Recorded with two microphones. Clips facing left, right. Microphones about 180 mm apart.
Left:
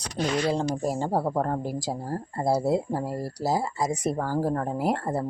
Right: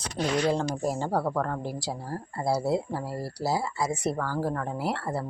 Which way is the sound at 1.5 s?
40° left (ahead or behind).